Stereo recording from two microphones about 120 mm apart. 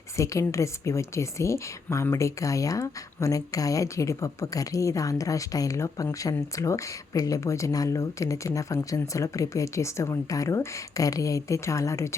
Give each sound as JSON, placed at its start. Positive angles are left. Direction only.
{"t": 0.2, "sound": "speech", "side_deg": 25}